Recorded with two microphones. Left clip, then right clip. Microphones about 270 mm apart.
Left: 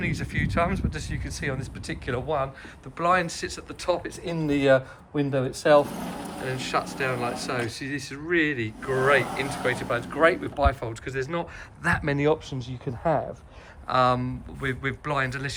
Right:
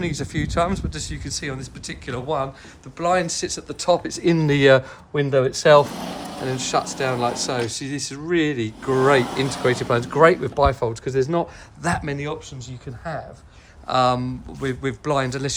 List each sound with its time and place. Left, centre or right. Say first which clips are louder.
0.0 s speech: right 3 dB; centre
6.4 s speech: right 5 dB; centre